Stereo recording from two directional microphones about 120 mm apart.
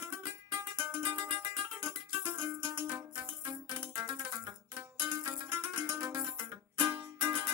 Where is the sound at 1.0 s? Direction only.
40° right (ahead or behind).